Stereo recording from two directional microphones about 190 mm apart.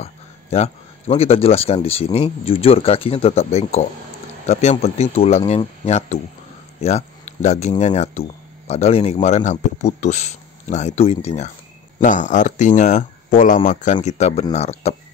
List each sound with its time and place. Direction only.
0.0 s speech: 35° left (ahead or behind)